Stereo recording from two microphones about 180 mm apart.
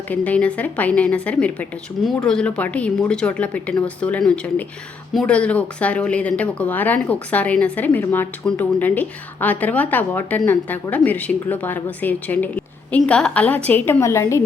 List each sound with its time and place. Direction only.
0.1 s speech: 10° left (ahead or behind)